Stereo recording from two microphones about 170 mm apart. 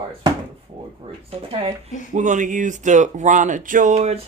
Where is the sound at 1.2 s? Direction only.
35° right (ahead or behind).